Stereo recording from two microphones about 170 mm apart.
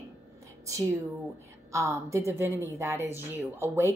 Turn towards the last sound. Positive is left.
turn(degrees=-15)  # may be behind; listen again after turning